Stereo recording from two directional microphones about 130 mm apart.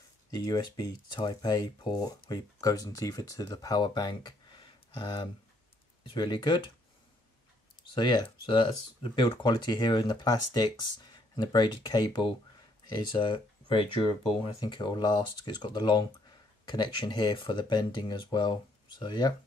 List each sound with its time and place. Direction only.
0.3 s speech: 35° left (ahead or behind)
7.8 s speech: 35° left (ahead or behind)